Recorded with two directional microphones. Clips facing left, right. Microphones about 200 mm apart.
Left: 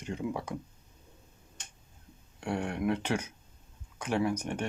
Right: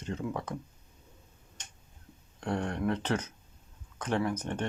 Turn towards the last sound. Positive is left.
turn(degrees=10)  # may be behind; listen again after turning